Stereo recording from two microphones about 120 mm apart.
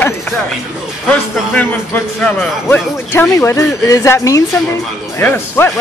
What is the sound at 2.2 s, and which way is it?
Speech, 15° left (ahead or behind).